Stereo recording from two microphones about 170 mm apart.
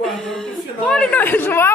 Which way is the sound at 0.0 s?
Centre (ahead or behind).